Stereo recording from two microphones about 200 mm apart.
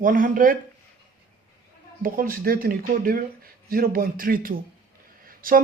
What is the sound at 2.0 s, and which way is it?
Speech, 45° right (ahead or behind).